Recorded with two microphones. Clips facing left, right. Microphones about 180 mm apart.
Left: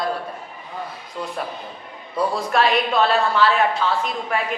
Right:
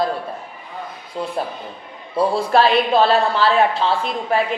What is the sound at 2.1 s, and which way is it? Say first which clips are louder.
A woman's voice: right 4 dB; 30° right (ahead or behind).